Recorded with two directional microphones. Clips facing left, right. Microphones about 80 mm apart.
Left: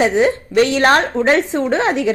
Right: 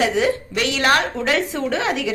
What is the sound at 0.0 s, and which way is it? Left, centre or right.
A woman's voice, left.